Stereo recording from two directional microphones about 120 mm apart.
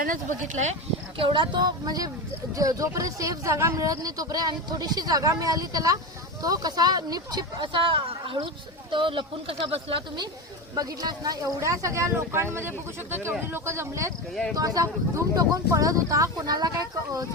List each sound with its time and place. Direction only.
0.3 s speech: 85° right
1.2 s speech: 40° right (ahead or behind)
10.8 s speech: 30° right (ahead or behind)